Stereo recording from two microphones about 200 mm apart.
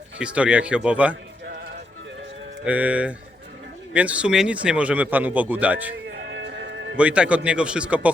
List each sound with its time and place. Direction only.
0.2 s speech: 5° right (ahead or behind)
2.6 s a man's voice: 5° right (ahead or behind)
6.2 s music: 60° right (ahead or behind)
6.9 s speech: 5° right (ahead or behind)